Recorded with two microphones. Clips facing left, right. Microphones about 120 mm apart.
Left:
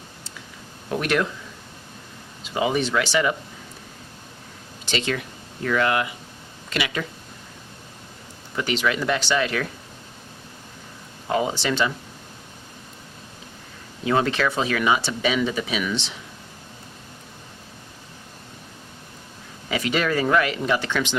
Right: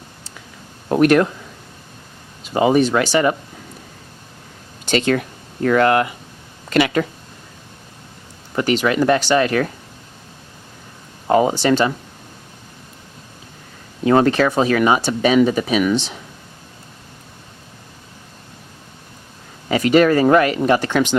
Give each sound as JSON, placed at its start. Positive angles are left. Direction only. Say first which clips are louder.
{"t": 0.9, "sound": "speech", "louder": "right 10 dB", "side_deg": -50}
{"t": 2.4, "sound": "speech", "louder": "right 8 dB", "side_deg": -45}
{"t": 4.9, "sound": "speech", "louder": "right 8 dB", "side_deg": -50}
{"t": 8.5, "sound": "speech", "louder": "right 7 dB", "side_deg": -45}
{"t": 11.3, "sound": "speech", "louder": "right 8 dB", "side_deg": -50}
{"t": 14.0, "sound": "speech", "louder": "right 7 dB", "side_deg": -45}
{"t": 19.6, "sound": "speech", "louder": "right 10 dB", "side_deg": -45}